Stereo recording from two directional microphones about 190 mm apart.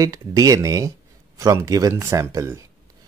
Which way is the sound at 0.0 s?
15° right (ahead or behind).